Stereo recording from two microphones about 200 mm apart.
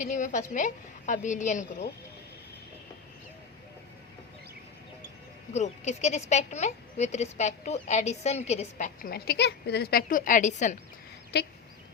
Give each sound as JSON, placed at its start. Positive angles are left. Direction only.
{"t": 0.0, "sound": "a woman's voice", "side_deg": 40}
{"t": 5.5, "sound": "a woman's voice", "side_deg": 35}
{"t": 11.3, "sound": "fowl", "side_deg": 55}